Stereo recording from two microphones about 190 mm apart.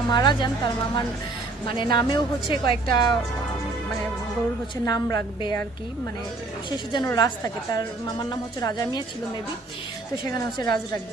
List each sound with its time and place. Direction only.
0.1 s a woman's voice: 25° left (ahead or behind)
4.9 s a woman's voice: 20° left (ahead or behind)
6.7 s a woman's voice: 20° left (ahead or behind)
10.3 s a woman's voice: 20° left (ahead or behind)